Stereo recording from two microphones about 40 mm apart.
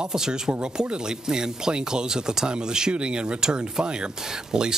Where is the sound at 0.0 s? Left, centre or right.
Centre.